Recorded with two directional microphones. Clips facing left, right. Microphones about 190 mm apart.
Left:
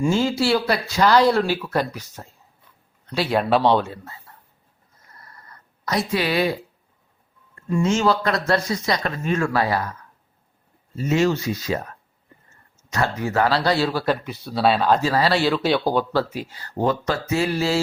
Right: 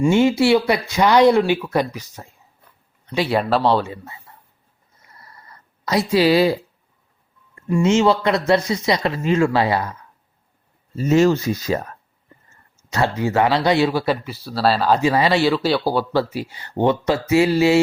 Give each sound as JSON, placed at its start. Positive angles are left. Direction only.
{"t": 0.5, "sound": "speech", "side_deg": -20}
{"t": 5.9, "sound": "speech", "side_deg": -30}
{"t": 7.8, "sound": "speech", "side_deg": -25}
{"t": 10.9, "sound": "speech", "side_deg": -40}
{"t": 12.9, "sound": "speech", "side_deg": -30}
{"t": 16.7, "sound": "speech", "side_deg": -25}